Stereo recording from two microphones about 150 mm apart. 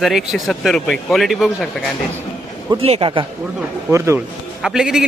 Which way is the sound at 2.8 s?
40° right (ahead or behind).